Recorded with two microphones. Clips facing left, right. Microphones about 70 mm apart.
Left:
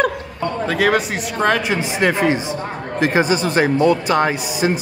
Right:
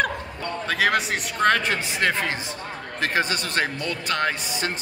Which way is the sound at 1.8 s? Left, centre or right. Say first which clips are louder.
Left 7 dB; centre.